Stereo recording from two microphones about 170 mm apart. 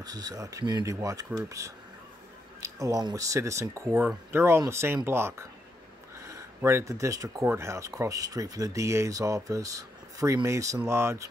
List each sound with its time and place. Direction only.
0.0 s speech: 20° right (ahead or behind)